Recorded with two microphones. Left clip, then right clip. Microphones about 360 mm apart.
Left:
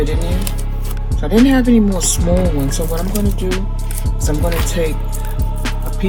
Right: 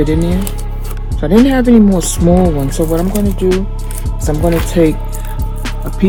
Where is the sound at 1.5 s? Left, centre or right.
Right.